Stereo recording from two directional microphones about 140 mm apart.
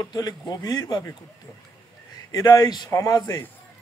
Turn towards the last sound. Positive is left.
turn(degrees=25)  # may be behind; listen again after turning